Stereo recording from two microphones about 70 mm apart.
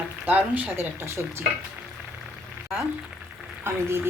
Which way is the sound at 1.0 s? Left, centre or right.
Right.